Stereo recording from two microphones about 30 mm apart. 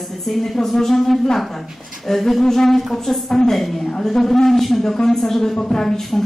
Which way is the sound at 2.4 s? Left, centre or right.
Centre.